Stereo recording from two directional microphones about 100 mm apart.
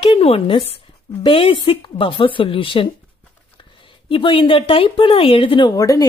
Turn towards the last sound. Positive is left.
turn(degrees=35)  # may be behind; listen again after turning